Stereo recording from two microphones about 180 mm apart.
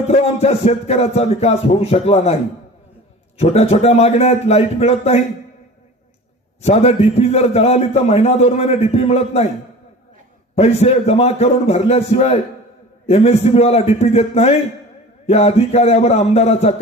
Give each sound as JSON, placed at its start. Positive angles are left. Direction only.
{"t": 0.1, "sound": "a man's voice", "side_deg": 35}
{"t": 6.6, "sound": "a man's voice", "side_deg": 35}
{"t": 10.5, "sound": "a man's voice", "side_deg": 35}